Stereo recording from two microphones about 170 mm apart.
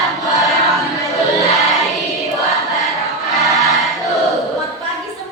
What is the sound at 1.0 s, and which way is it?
Crowd, 20° left (ahead or behind).